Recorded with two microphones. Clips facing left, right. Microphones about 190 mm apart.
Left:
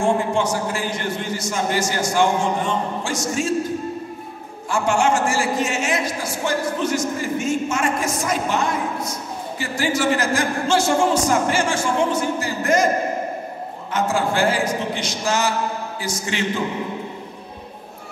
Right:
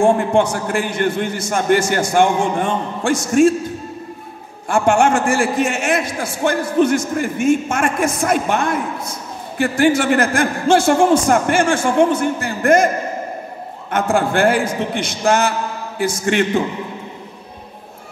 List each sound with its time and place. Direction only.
0.0 s a man's voice: 55° right (ahead or behind)
4.6 s a man's voice: 55° right (ahead or behind)
13.8 s a man's voice: 55° right (ahead or behind)